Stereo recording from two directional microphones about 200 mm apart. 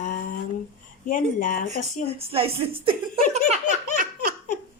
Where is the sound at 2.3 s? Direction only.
30° right (ahead or behind).